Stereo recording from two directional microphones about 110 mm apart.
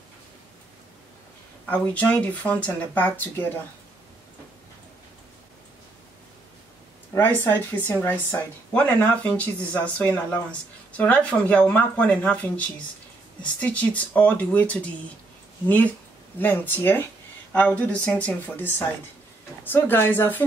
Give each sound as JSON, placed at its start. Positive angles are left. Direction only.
{"t": 1.7, "sound": "speech", "side_deg": 10}
{"t": 7.2, "sound": "speech", "side_deg": 20}
{"t": 16.3, "sound": "a woman's voice", "side_deg": 15}